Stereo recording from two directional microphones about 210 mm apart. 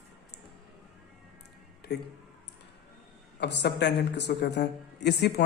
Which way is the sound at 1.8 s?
50° left (ahead or behind).